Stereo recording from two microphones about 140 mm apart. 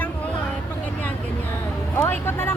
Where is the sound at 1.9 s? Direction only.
15° left (ahead or behind).